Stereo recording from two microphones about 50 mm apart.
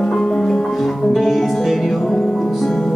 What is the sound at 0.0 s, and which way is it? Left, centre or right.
Music, centre.